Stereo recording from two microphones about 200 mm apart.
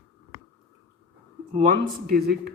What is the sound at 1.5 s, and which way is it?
Speech, 45° right (ahead or behind).